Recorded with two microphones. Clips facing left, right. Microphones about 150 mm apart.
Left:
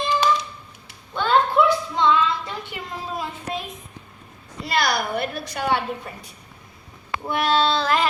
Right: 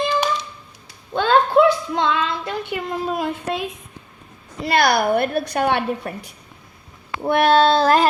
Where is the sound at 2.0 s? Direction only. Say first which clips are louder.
Left 6 dB; 65° right (ahead or behind).